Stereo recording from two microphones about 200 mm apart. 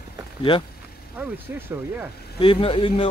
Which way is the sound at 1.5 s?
10° right (ahead or behind).